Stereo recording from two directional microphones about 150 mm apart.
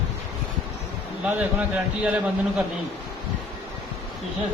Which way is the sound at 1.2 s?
10° right (ahead or behind).